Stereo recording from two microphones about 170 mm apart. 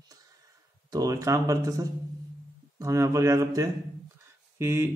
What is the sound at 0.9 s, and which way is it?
A man's voice, 20° right (ahead or behind).